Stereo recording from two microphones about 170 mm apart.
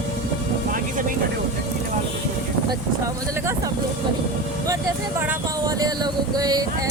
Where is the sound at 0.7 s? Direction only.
50° right (ahead or behind).